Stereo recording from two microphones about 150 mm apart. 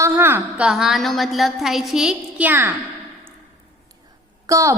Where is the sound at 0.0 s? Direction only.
15° right (ahead or behind).